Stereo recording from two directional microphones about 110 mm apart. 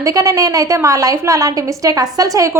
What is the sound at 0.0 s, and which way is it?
A woman's voice, 30° right (ahead or behind).